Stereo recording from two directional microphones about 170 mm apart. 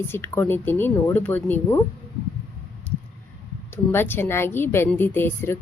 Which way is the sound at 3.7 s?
15° left (ahead or behind).